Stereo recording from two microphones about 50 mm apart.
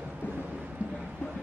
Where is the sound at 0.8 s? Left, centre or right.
Right.